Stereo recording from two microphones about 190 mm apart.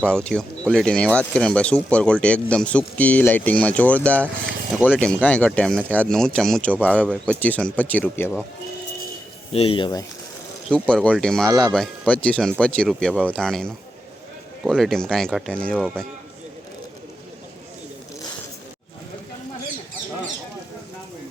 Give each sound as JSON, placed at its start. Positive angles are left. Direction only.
{"t": 0.0, "sound": "speech", "side_deg": 5}
{"t": 9.5, "sound": "speech", "side_deg": 30}
{"t": 10.8, "sound": "speech", "side_deg": 5}